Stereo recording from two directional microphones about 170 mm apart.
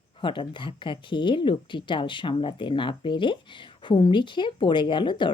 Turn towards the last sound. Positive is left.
turn(degrees=30)  # may be behind; listen again after turning